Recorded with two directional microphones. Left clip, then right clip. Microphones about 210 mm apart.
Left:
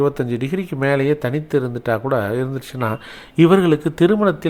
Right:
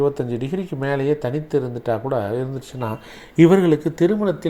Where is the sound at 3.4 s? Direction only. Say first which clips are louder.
Left 1 dB; 10° left (ahead or behind).